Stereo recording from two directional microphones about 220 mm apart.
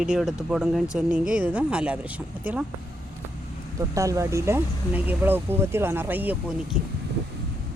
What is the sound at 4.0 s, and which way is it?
Speech, 15° right (ahead or behind).